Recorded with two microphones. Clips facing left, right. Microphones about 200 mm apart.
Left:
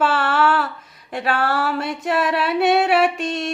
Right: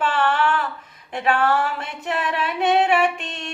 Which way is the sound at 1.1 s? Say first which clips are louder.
Right 1 dB; 40° left (ahead or behind).